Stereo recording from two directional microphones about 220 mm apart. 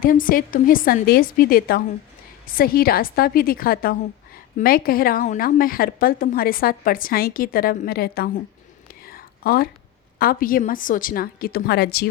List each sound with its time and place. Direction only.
0.0 s a woman's voice: 40° left (ahead or behind)
9.0 s whispering: 40° left (ahead or behind)
10.2 s a woman's voice: 40° left (ahead or behind)